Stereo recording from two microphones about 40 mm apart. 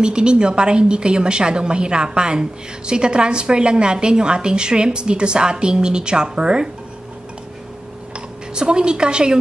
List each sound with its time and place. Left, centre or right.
0.0 s a woman's voice: right
8.5 s a woman's voice: right